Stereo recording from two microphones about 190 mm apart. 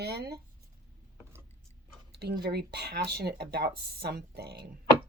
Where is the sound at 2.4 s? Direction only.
60° right (ahead or behind).